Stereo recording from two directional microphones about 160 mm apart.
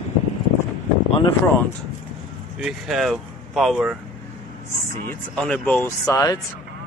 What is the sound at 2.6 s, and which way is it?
Speech, centre (ahead or behind).